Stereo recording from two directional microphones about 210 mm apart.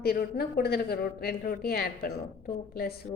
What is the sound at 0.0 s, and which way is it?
A woman's voice, 45° left (ahead or behind).